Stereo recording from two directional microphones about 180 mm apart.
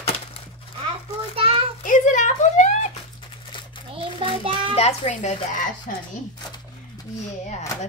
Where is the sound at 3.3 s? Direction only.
30° left (ahead or behind).